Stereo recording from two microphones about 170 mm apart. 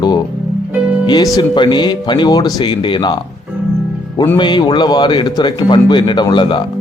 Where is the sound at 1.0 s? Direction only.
25° left (ahead or behind).